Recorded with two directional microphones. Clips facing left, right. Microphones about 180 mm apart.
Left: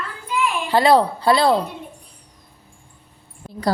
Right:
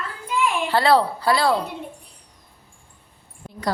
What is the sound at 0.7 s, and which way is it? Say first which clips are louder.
Speech: left 4 dB; 15° left (ahead or behind).